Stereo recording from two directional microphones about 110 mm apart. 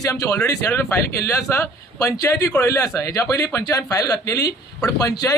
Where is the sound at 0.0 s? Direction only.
30° left (ahead or behind).